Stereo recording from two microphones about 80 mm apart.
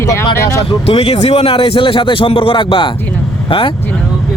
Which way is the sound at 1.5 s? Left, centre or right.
Left.